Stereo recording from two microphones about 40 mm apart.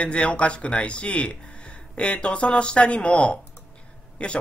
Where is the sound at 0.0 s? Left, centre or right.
Left.